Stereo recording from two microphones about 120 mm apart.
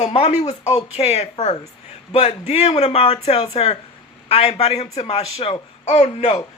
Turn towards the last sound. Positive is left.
turn(degrees=60)  # may be behind; listen again after turning